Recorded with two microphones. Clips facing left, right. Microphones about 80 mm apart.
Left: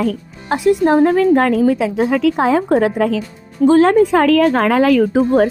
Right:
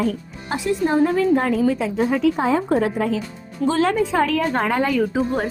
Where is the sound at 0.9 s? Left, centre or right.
Left.